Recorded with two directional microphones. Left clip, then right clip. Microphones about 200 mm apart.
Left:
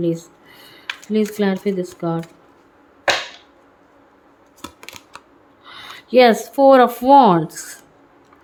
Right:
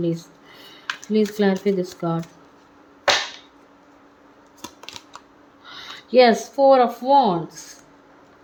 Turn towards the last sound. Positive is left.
turn(degrees=25)  # may be behind; listen again after turning